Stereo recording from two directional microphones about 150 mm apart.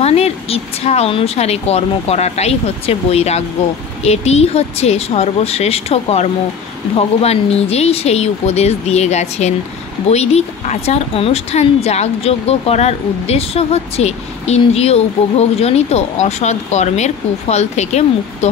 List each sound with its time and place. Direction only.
0.0 s speech: 45° left (ahead or behind)